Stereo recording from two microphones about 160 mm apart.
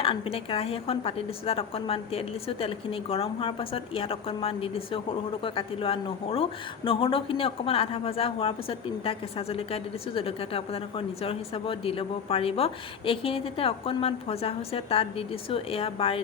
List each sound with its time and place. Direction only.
0.0 s a woman's voice: 35° left (ahead or behind)